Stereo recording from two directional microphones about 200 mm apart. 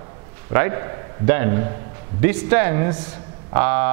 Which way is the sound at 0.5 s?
20° right (ahead or behind).